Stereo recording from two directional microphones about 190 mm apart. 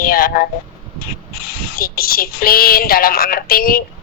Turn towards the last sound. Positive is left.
turn(degrees=50)  # may be behind; listen again after turning